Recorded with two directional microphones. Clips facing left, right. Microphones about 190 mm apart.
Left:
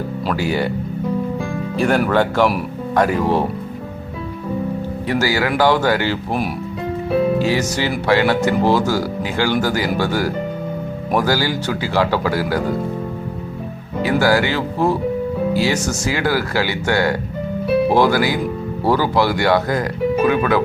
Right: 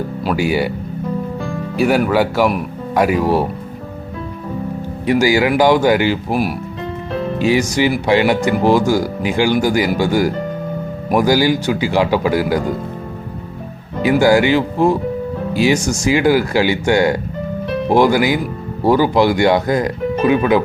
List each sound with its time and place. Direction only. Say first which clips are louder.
0.3 s speech: right 3 dB; 10° right (ahead or behind)
1.7 s speech: right 2 dB; 5° right (ahead or behind)
5.0 s speech: right 6 dB; 15° right (ahead or behind)
7.3 s music: right 3 dB; 15° right (ahead or behind)
8.0 s speech: left 2 dB; 15° right (ahead or behind)
14.0 s speech: right 4 dB; 15° right (ahead or behind)